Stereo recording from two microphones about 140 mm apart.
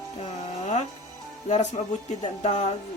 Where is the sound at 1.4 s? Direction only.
55° left (ahead or behind).